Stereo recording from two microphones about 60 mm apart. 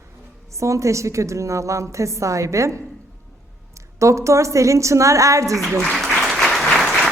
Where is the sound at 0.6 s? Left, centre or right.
Right.